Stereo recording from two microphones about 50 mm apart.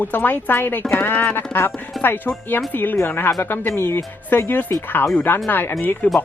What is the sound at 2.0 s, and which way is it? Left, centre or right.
Speech, left.